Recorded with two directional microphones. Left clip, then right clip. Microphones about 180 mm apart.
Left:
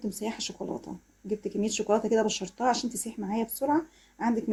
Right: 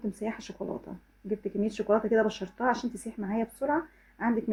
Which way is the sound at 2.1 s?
30° left (ahead or behind).